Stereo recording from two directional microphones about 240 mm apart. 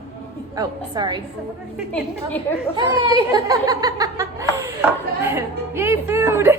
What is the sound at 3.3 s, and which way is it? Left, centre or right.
A woman's voice, centre.